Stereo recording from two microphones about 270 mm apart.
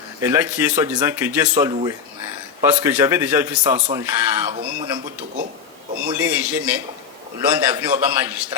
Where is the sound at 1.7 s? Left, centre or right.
Centre.